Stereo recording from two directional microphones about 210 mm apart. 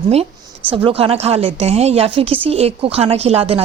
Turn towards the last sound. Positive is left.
turn(degrees=-30)  # may be behind; listen again after turning